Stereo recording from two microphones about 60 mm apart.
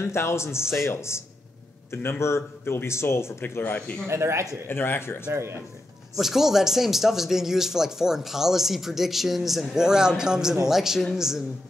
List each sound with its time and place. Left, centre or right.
0.0 s speech: left
4.1 s speech: right
4.6 s speech: left
5.3 s speech: right
6.1 s a woman's voice: centre